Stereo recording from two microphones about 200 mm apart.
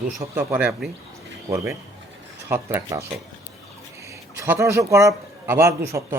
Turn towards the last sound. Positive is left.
turn(degrees=-15)  # may be behind; listen again after turning